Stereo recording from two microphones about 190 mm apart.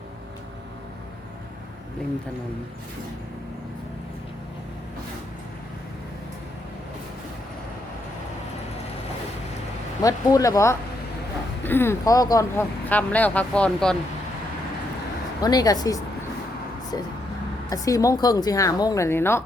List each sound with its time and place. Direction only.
10.0 s speech: 20° left (ahead or behind)
15.4 s a woman's voice: 20° left (ahead or behind)